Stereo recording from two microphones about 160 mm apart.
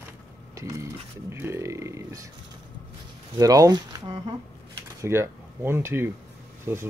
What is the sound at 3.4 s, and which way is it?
Speech, 20° right (ahead or behind).